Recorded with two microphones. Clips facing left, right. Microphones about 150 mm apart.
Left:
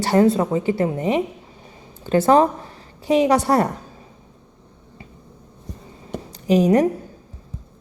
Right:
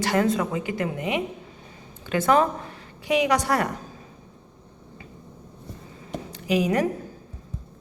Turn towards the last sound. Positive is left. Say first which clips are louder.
# left 7 dB
turn(degrees=35)  # may be behind; listen again after turning